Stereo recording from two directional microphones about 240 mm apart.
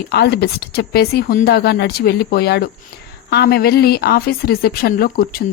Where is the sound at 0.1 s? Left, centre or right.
Left.